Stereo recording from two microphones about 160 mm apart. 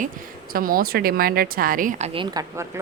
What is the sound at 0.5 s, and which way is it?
Speech, 65° right (ahead or behind).